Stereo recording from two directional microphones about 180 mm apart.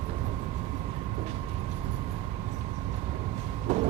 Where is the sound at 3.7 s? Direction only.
40° right (ahead or behind).